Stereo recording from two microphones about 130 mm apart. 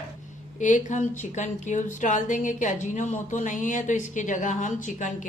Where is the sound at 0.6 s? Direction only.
75° left (ahead or behind).